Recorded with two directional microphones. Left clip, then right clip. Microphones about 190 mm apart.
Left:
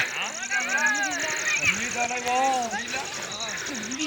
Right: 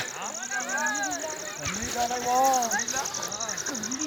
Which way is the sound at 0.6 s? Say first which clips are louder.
Left 5 dB; 20° right (ahead or behind).